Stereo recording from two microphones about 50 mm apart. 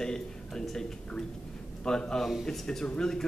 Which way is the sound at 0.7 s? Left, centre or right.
Centre.